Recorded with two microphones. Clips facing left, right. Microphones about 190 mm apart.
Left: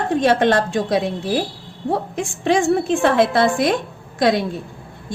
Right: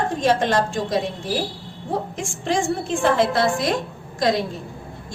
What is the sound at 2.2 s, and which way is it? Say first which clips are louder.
A woman's voice: left 6 dB; 60° left (ahead or behind).